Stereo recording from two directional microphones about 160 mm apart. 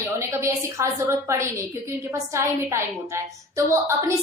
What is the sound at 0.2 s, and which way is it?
A woman's voice, 15° right (ahead or behind).